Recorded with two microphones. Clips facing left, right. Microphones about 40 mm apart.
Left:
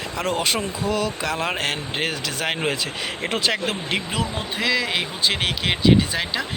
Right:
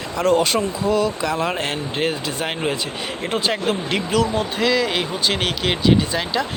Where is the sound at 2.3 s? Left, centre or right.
Left.